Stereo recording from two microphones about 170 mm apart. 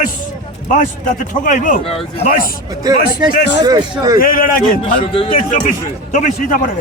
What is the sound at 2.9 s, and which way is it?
Speech, 20° right (ahead or behind).